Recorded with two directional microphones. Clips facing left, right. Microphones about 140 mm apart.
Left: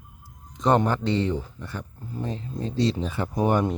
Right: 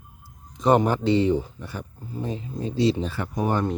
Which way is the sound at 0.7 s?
10° right (ahead or behind).